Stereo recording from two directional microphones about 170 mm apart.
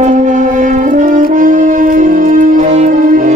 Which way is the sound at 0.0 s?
45° right (ahead or behind).